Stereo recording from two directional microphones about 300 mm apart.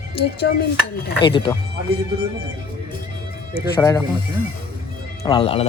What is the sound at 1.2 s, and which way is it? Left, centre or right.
Speech, centre.